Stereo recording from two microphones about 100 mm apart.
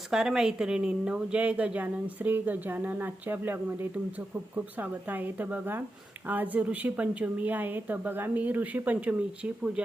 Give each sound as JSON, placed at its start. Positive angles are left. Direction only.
{"t": 0.1, "sound": "speech", "side_deg": -5}